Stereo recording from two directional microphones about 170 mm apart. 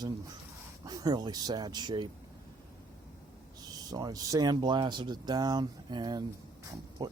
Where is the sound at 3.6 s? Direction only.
20° right (ahead or behind).